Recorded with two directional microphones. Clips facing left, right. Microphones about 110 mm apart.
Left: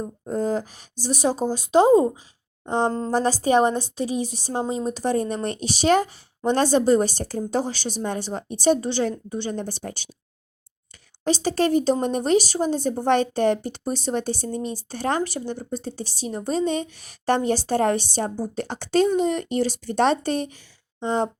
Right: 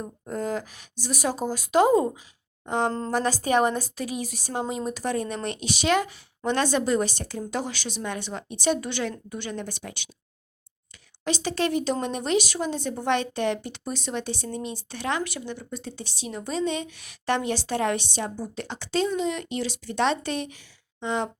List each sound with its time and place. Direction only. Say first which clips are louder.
0.3 s a woman's voice: left 5 dB; 30° left (ahead or behind)
11.3 s a woman's voice: left 5 dB; 35° left (ahead or behind)